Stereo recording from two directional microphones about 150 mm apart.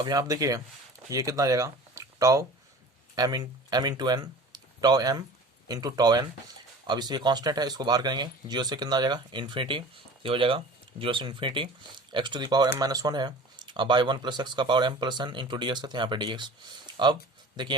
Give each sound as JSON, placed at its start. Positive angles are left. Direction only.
{"t": 0.0, "sound": "speech", "side_deg": -25}